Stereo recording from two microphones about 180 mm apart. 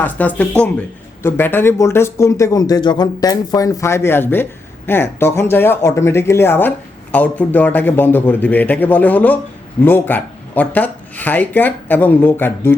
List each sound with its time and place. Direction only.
0.0 s speech: 10° left (ahead or behind)